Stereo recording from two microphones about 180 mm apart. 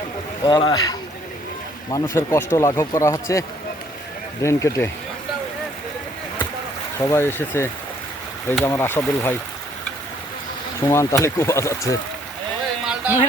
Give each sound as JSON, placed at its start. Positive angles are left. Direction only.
{"t": 0.4, "sound": "speech", "side_deg": 25}
{"t": 7.0, "sound": "speech", "side_deg": 15}
{"t": 10.8, "sound": "speech", "side_deg": 15}
{"t": 12.8, "sound": "a sound", "side_deg": -5}